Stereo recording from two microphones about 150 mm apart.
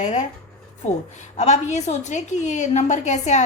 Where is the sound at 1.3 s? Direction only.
50° left (ahead or behind).